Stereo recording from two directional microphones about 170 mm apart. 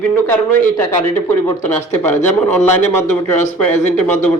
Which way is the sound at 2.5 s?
10° left (ahead or behind).